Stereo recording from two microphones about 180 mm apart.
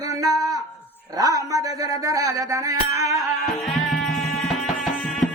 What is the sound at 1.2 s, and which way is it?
Music, 20° right (ahead or behind).